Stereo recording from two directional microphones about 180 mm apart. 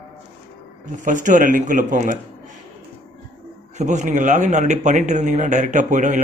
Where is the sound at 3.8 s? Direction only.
40° right (ahead or behind).